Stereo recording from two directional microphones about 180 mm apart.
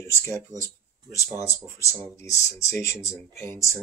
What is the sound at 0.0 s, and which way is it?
Speech, 15° left (ahead or behind).